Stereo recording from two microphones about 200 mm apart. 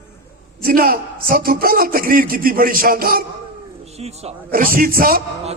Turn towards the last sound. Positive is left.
turn(degrees=-45)  # may be behind; listen again after turning